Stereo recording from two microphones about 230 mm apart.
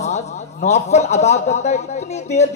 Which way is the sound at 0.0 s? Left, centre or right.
Left.